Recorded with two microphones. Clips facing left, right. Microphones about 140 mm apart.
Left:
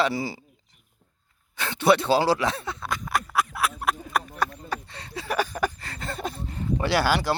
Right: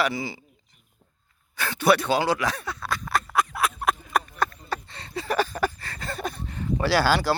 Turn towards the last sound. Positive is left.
turn(degrees=20)  # may be behind; listen again after turning